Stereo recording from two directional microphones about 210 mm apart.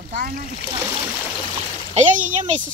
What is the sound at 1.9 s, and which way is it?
Speech, 35° right (ahead or behind).